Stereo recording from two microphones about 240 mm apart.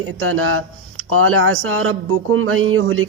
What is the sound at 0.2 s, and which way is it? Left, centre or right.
Speech, right.